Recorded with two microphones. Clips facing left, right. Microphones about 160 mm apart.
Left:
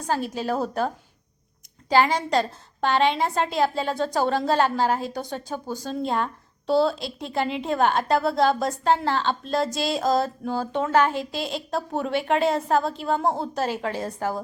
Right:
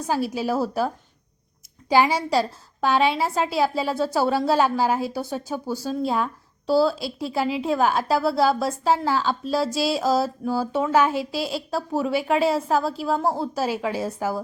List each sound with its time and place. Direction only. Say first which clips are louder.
0.1 s a woman's voice: right 2 dB; 10° right (ahead or behind)
1.9 s a woman's voice: right 1 dB; 10° right (ahead or behind)